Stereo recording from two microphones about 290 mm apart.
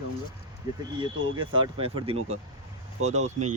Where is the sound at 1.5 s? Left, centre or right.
Centre.